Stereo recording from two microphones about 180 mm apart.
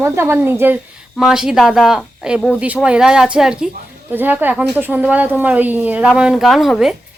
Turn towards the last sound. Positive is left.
turn(degrees=0)  # may be behind; listen again after turning